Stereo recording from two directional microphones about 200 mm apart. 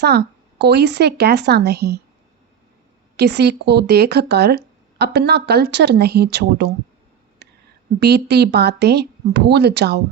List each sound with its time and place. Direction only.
0.0 s speech: 55° right (ahead or behind)
3.2 s speech: 55° right (ahead or behind)
7.4 s a sound: 55° right (ahead or behind)
7.9 s speech: 55° right (ahead or behind)